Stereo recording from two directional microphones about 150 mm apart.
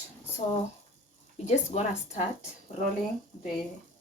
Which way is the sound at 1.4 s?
50° left (ahead or behind).